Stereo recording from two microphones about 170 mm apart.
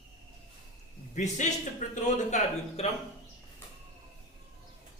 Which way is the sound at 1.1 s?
45° left (ahead or behind).